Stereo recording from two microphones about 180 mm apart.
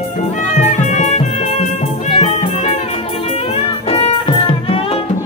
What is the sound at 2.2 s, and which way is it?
Music, 40° left (ahead or behind).